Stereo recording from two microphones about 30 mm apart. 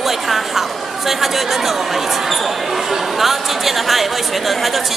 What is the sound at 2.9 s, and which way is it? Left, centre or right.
A woman's voice, centre.